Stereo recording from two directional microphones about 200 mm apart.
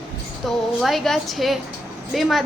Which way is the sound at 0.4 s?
Centre (ahead or behind).